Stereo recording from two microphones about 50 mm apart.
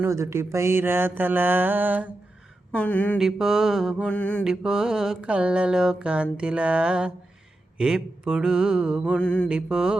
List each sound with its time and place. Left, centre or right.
0.1 s mantra: right
2.7 s a sound: left
3.2 s speech: centre
4.1 s mantra: left
4.4 s speech: centre
5.3 s speech: right
9.1 s mantra: left
9.5 s speech: centre